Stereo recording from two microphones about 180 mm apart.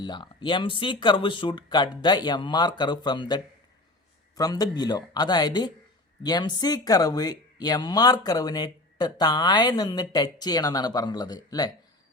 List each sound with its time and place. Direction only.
0.0 s speech: 25° left (ahead or behind)